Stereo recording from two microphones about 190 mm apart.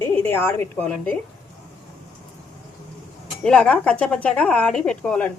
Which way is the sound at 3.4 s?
5° left (ahead or behind).